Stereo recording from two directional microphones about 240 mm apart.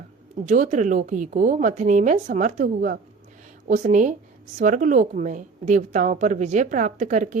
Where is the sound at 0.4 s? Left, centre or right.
Right.